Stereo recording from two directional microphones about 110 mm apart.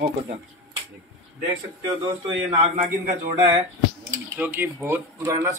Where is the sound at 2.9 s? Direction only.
30° right (ahead or behind).